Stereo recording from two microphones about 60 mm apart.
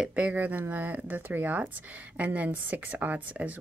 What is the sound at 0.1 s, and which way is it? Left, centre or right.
A woman's voice, right.